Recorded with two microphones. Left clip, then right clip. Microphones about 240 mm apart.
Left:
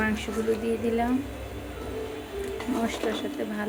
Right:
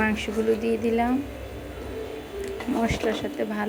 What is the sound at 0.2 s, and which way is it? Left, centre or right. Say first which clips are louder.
Speech: right 3 dB; centre.